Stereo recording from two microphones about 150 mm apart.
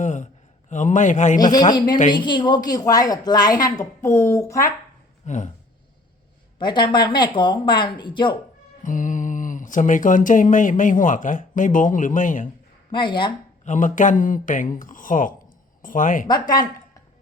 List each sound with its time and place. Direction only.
0.0 s a man's voice: 55° left (ahead or behind)
1.4 s a woman's voice: 30° left (ahead or behind)
5.2 s speech: 55° left (ahead or behind)
6.6 s speech: 30° left (ahead or behind)
8.8 s speech: 60° left (ahead or behind)
12.9 s speech: 30° left (ahead or behind)
13.7 s speech: 60° left (ahead or behind)
16.2 s a woman's voice: 25° left (ahead or behind)